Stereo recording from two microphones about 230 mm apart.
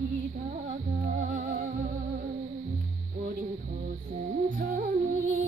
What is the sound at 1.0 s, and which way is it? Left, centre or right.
Music, right.